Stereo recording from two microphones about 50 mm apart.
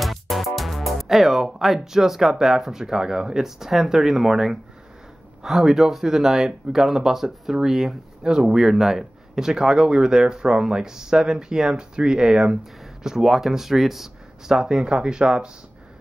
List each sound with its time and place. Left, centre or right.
0.0 s speech: centre